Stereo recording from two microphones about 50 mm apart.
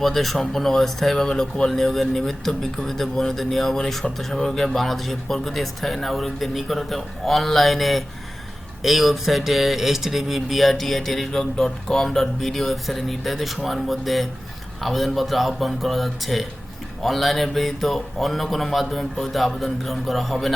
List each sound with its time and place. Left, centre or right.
0.0 s speech: centre